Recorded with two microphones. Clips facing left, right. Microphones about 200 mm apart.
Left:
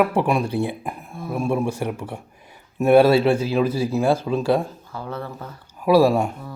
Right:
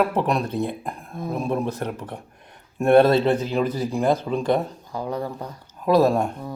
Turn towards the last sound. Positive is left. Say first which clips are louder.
# left 2 dB
turn(degrees=10)  # may be behind; listen again after turning